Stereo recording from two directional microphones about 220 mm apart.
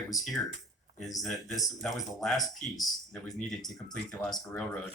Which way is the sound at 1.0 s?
Centre (ahead or behind).